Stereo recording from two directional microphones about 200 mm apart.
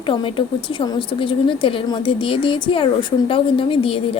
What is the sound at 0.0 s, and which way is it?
A woman's voice, 25° left (ahead or behind).